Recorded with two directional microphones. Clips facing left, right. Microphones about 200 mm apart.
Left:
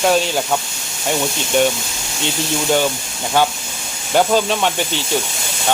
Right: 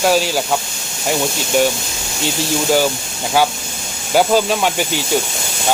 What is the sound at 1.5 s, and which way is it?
Speech, 5° right (ahead or behind).